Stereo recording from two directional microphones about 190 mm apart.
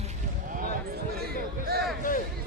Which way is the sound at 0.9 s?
55° right (ahead or behind).